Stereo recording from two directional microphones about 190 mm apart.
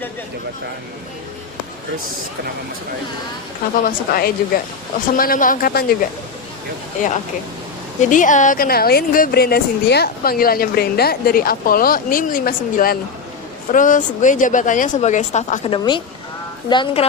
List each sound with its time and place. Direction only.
3.8 s speech: 50° left (ahead or behind)
8.1 s speech: 40° left (ahead or behind)
15.6 s a woman's voice: 25° left (ahead or behind)